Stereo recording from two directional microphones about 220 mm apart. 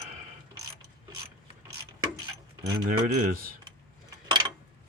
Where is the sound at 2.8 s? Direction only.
40° right (ahead or behind).